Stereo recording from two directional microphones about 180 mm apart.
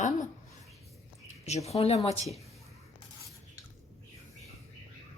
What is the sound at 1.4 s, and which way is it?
Speech, 35° left (ahead or behind).